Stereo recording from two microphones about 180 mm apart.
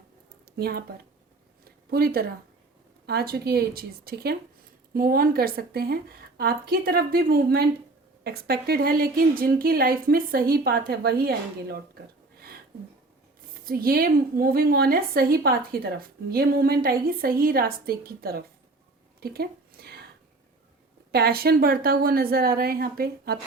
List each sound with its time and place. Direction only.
0.5 s a woman's voice: 60° right (ahead or behind)
1.9 s a woman's voice: 60° right (ahead or behind)
13.7 s a woman's voice: 55° right (ahead or behind)
19.2 s a sound: 60° right (ahead or behind)
21.1 s a woman's voice: 60° right (ahead or behind)